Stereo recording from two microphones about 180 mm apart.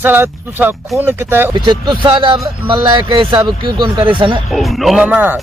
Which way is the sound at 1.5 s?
25° right (ahead or behind).